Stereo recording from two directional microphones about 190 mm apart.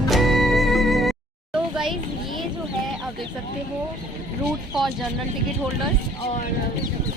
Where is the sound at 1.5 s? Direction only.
5° right (ahead or behind).